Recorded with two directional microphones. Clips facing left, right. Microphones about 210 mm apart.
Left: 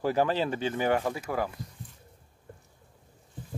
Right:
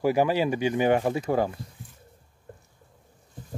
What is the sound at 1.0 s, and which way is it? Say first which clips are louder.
Speech: right 6 dB; 30° right (ahead or behind).